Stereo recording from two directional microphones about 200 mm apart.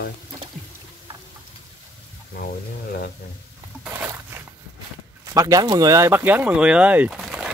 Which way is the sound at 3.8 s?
10° right (ahead or behind).